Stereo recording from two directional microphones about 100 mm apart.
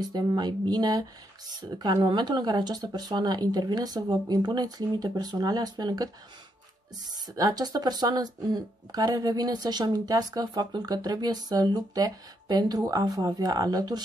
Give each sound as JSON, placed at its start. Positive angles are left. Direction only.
{"t": 0.0, "sound": "speech", "side_deg": -40}
{"t": 7.3, "sound": "speech", "side_deg": -40}